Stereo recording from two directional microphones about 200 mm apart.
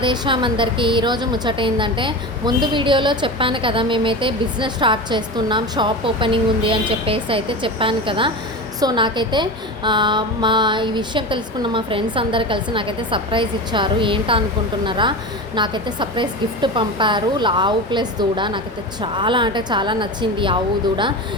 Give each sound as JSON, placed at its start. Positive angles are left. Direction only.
{"t": 0.0, "sound": "a woman's voice", "side_deg": -25}